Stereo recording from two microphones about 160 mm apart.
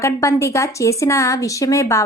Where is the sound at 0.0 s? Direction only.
15° left (ahead or behind).